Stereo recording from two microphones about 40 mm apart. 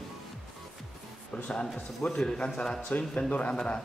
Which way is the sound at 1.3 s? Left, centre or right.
Left.